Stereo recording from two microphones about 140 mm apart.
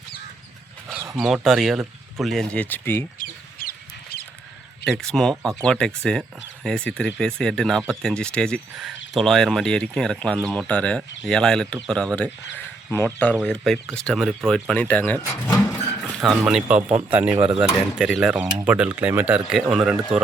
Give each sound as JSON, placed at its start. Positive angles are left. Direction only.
{"t": 1.2, "sound": "speech", "side_deg": 0}
{"t": 3.2, "sound": "chicken", "side_deg": 90}
{"t": 4.9, "sound": "speech", "side_deg": 5}
{"t": 15.3, "sound": "a sound", "side_deg": 20}
{"t": 16.4, "sound": "speech", "side_deg": -5}